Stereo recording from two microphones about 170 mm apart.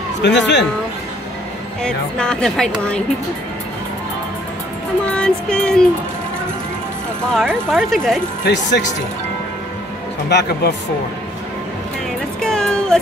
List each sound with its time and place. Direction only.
0.2 s speech: 90° left
1.8 s speech: 5° left (ahead or behind)
5.0 s speech: 5° left (ahead or behind)
7.3 s speech: centre (ahead or behind)
8.5 s speech: 90° left
12.4 s music: 5° left (ahead or behind)